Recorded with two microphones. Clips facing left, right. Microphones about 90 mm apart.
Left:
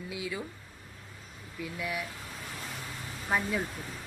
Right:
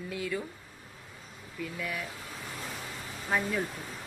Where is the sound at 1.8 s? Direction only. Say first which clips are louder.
Left 2 dB; 10° left (ahead or behind).